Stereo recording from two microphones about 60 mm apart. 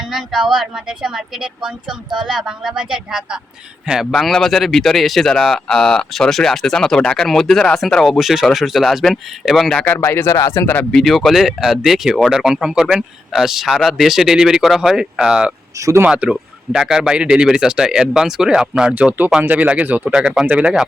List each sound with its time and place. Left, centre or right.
0.1 s speech: centre
4.1 s speech: centre
10.0 s speech: left
10.9 s speech: centre
16.0 s speech: right
16.3 s speech: centre